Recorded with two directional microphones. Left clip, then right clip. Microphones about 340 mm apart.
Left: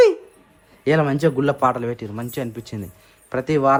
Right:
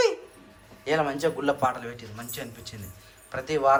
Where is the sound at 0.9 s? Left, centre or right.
Left.